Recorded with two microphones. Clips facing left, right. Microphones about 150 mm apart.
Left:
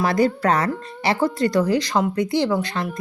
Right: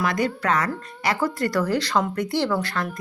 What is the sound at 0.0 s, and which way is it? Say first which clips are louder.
Speech: left 5 dB; 35° left (ahead or behind).